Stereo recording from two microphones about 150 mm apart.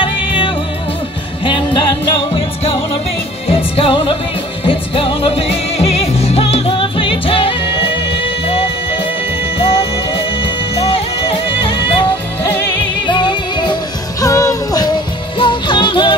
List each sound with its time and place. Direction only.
1.4 s music: 30° left (ahead or behind)
3.4 s music: 40° left (ahead or behind)
9.6 s music: 40° left (ahead or behind)